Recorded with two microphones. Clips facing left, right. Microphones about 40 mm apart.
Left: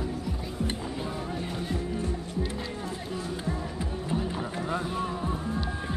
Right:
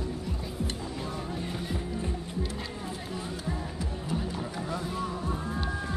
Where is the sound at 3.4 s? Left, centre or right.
Centre.